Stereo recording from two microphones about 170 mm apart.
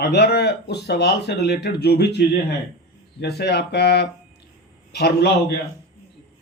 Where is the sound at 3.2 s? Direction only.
75° left (ahead or behind).